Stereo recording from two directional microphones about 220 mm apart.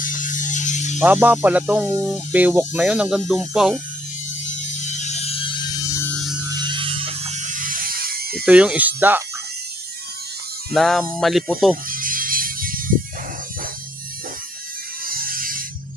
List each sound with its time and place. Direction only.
0.0 s music: 35° left (ahead or behind)
0.9 s speech: 5° right (ahead or behind)
4.4 s music: 30° left (ahead or behind); by 6.3 s 5° left (ahead or behind)
6.5 s electric shaver: 20° right (ahead or behind); by 8.4 s 45° right (ahead or behind)
8.4 s speech: 5° right (ahead or behind)
10.8 s speech: centre (ahead or behind)
11.9 s music: 40° right (ahead or behind)
15.0 s music: 40° right (ahead or behind)